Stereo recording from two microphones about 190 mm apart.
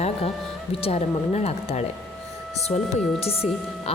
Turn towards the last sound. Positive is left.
turn(degrees=30)  # may be behind; listen again after turning